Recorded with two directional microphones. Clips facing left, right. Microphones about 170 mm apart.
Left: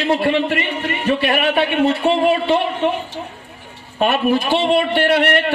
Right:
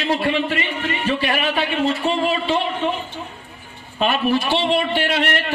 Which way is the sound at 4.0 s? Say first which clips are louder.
Left 3 dB; 50° left (ahead or behind).